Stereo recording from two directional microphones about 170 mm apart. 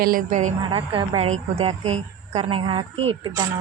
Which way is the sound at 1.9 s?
40° right (ahead or behind).